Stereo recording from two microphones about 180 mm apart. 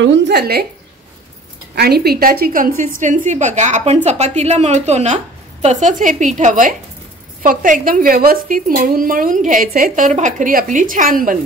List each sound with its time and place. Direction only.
0.0 s a woman's voice: 90° right; by 0.7 s 65° right (ahead or behind)
1.8 s a woman's voice: 60° right (ahead or behind)